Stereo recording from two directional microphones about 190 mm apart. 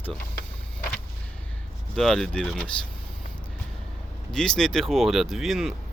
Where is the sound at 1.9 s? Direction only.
Centre (ahead or behind).